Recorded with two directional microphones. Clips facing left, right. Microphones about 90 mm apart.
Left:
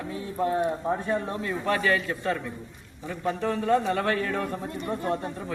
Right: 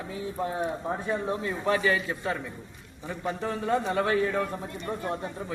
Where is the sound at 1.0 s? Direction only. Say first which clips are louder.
Left 1 dB; 15° right (ahead or behind).